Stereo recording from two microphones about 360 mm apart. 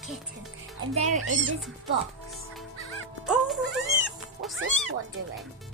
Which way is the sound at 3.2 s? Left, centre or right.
Centre.